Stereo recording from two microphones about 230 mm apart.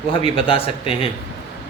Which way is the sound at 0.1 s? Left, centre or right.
Left.